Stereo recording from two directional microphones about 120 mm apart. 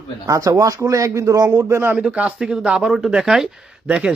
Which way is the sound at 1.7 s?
20° right (ahead or behind).